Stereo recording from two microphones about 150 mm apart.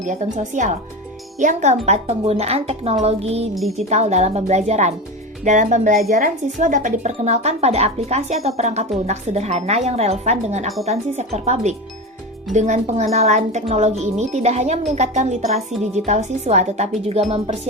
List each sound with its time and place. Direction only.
0.0 s speech: 55° right (ahead or behind)
3.5 s speech: centre (ahead or behind)
3.8 s speech: 50° right (ahead or behind)